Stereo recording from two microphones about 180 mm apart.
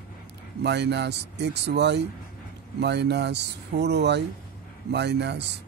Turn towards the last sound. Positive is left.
turn(degrees=-70)  # may be behind; listen again after turning